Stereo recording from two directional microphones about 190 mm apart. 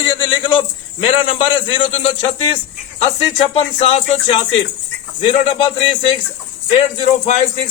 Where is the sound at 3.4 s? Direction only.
30° left (ahead or behind).